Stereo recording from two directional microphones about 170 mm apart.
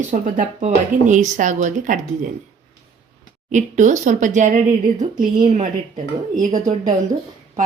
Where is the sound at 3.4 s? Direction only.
45° right (ahead or behind).